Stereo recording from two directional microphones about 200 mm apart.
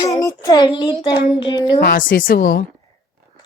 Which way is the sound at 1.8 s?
45° left (ahead or behind).